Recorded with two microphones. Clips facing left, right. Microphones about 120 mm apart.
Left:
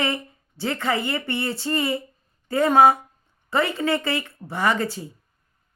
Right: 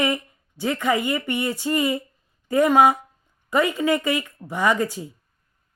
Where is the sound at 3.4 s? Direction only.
15° right (ahead or behind).